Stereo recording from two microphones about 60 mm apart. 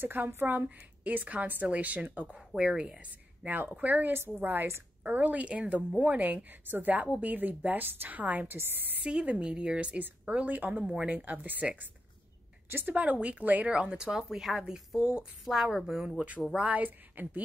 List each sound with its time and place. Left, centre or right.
0.0 s a woman's voice: right
2.3 s a woman's voice: centre
3.4 s a woman's voice: right
9.0 s a woman's voice: centre; by 12.9 s right
12.9 s a woman's voice: right; by 16.2 s centre
16.5 s a woman's voice: right